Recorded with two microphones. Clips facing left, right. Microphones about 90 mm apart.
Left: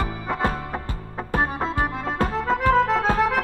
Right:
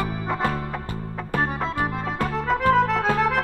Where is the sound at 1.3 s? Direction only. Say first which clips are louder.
Left 1 dB; 25° left (ahead or behind).